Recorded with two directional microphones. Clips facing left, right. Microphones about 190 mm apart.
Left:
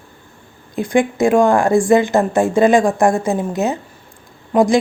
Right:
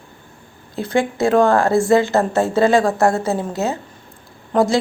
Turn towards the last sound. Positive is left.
turn(degrees=15)  # may be behind; listen again after turning